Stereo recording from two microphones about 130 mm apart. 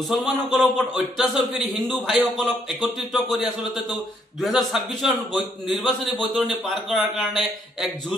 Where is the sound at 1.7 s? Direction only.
Centre (ahead or behind).